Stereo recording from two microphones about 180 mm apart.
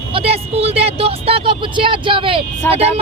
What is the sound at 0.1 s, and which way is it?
Speech, 35° right (ahead or behind).